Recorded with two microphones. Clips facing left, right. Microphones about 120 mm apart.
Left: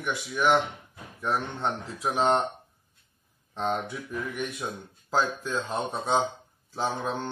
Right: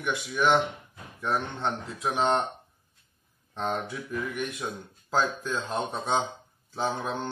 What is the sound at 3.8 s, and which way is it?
Speech, centre (ahead or behind).